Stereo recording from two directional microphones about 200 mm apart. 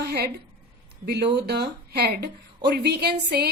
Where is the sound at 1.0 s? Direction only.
55° right (ahead or behind).